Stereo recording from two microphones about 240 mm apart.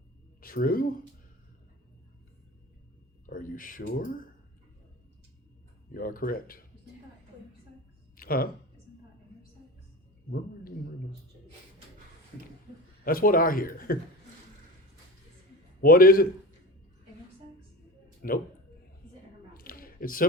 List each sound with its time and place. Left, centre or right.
0.4 s speech: left
3.2 s speech: left
5.9 s speech: left
8.1 s a sound: left
13.1 s speech: left
15.8 s speech: left
18.2 s speech: left
19.5 s a sound: left